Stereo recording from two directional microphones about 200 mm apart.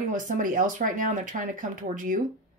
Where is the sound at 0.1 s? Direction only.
40° right (ahead or behind).